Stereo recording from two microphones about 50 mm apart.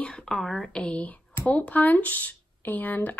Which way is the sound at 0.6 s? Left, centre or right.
Left.